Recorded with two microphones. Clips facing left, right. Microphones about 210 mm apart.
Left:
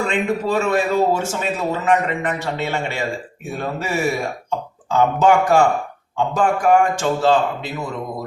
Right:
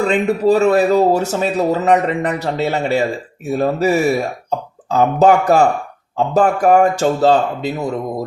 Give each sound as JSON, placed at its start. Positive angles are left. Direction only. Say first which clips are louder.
{"t": 0.0, "sound": "speech", "louder": "right 6 dB", "side_deg": -40}